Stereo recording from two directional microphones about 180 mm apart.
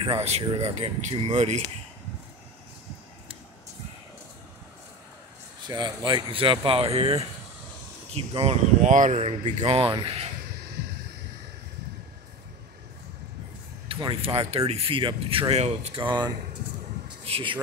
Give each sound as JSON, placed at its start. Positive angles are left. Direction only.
{"t": 0.2, "sound": "speech", "side_deg": -30}
{"t": 5.7, "sound": "speech", "side_deg": -25}
{"t": 13.8, "sound": "speech", "side_deg": -30}